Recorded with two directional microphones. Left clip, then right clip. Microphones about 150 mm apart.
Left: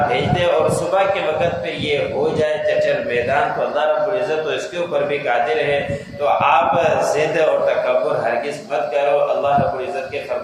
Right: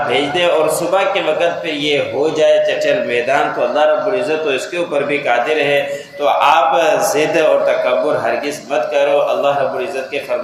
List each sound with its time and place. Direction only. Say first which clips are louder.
2.4 s a man's voice: right 7 dB; 35° right (ahead or behind)
6.4 s a man's voice: right 4 dB; 35° right (ahead or behind)